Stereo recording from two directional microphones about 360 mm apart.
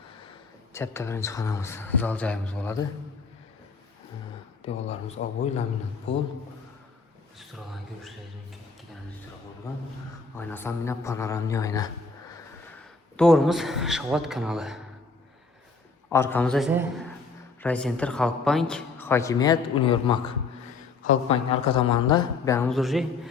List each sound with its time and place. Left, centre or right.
0.7 s a man's voice: centre
4.6 s a man's voice: centre
7.3 s a woman's voice: centre
10.3 s a man's voice: centre
13.1 s a woman's voice: centre
16.0 s a woman's voice: centre